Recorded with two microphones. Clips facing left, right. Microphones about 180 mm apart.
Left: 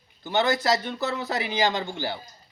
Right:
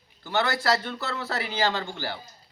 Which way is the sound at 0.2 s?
20° left (ahead or behind).